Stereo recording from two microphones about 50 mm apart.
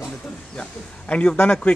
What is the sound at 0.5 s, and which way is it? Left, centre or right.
A man's voice, left.